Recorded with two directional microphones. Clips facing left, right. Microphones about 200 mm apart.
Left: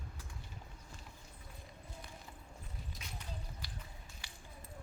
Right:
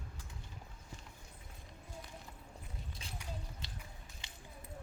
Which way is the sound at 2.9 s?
30° right (ahead or behind).